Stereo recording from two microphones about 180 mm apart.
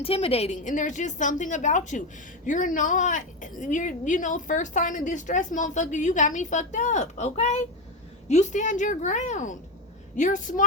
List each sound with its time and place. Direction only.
0.0 s a woman's voice: 30° left (ahead or behind)